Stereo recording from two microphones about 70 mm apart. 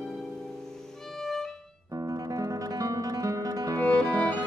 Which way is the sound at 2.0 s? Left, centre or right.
Right.